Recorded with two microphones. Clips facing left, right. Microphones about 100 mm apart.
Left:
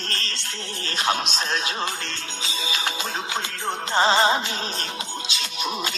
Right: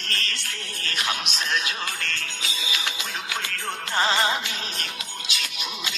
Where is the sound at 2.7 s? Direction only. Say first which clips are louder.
Left 3 dB; 35° left (ahead or behind).